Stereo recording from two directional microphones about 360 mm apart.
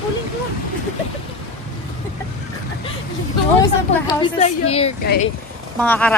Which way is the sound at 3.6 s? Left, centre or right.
Centre.